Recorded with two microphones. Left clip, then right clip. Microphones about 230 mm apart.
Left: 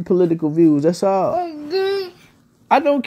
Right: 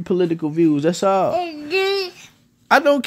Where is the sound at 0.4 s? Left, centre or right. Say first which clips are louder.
Left 3 dB; right; by 2.1 s centre.